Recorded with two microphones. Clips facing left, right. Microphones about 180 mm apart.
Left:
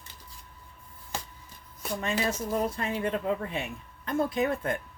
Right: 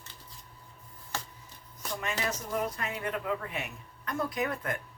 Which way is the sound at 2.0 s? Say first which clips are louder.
Left 5 dB; 30° left (ahead or behind).